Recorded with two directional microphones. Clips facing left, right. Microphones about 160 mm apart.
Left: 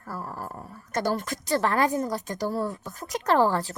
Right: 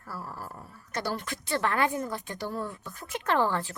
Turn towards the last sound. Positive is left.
turn(degrees=35)  # may be behind; listen again after turning